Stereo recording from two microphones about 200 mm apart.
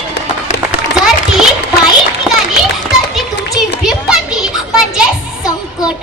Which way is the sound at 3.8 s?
5° right (ahead or behind).